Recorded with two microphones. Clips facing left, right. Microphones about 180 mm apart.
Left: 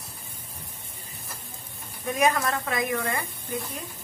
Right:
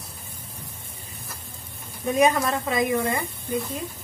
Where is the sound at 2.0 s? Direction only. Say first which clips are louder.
Right 4 dB; 20° right (ahead or behind).